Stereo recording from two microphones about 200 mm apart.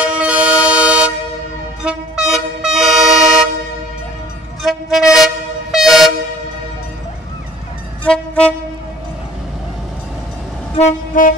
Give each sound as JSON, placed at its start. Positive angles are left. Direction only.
{"t": 0.0, "sound": "toot", "side_deg": -5}
{"t": 1.8, "sound": "vehicle", "side_deg": -5}
{"t": 4.6, "sound": "train", "side_deg": 0}
{"t": 8.0, "sound": "train", "side_deg": 5}
{"t": 10.8, "sound": "train", "side_deg": 40}